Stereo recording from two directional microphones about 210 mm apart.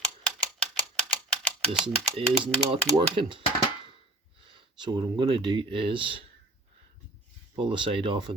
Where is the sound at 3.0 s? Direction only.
25° right (ahead or behind).